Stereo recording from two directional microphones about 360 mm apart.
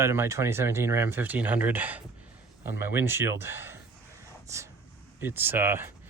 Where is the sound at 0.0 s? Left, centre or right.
Centre.